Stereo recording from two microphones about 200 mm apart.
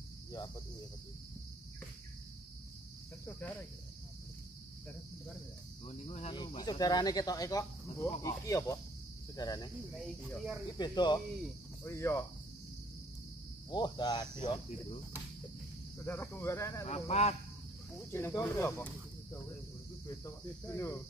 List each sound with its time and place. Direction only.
5.9 s speech: 30° left (ahead or behind)
8.2 s cricket: 15° left (ahead or behind)
9.4 s speech: 20° left (ahead or behind)
9.9 s speech: centre (ahead or behind)
10.8 s speech: 20° left (ahead or behind)
11.8 s cricket: 15° left (ahead or behind)
13.7 s speech: 20° left (ahead or behind)
16.1 s cricket: 10° left (ahead or behind)
16.8 s speech: 35° left (ahead or behind)
18.1 s cricket: 10° left (ahead or behind)
20.1 s cricket: 15° left (ahead or behind)